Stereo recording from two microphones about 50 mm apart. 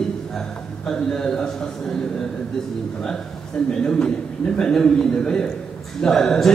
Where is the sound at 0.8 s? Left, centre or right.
Centre.